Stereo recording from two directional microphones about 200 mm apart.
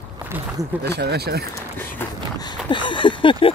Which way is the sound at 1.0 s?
55° right (ahead or behind).